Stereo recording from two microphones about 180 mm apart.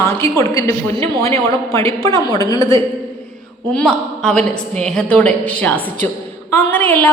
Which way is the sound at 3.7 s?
5° left (ahead or behind).